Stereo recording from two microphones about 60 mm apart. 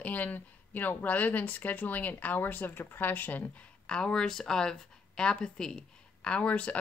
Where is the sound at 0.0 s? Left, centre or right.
Left.